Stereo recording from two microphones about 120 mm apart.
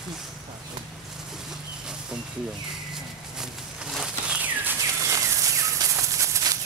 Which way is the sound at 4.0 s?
10° right (ahead or behind).